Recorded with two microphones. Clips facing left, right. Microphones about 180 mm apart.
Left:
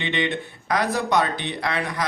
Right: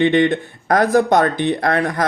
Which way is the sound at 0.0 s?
50° right (ahead or behind).